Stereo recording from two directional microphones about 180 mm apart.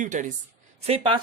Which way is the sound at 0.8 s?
30° right (ahead or behind).